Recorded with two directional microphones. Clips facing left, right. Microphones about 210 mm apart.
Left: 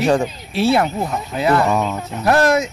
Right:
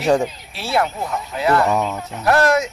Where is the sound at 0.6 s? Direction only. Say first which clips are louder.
Left 5 dB; 20° left (ahead or behind).